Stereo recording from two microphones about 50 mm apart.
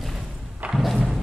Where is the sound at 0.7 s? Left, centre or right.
Centre.